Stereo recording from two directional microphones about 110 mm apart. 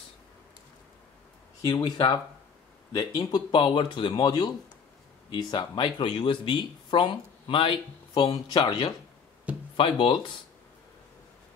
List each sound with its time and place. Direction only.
1.7 s speech: 40° left (ahead or behind)